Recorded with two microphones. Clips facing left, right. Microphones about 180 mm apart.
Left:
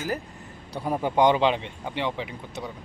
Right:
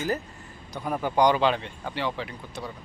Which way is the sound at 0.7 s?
30° left (ahead or behind).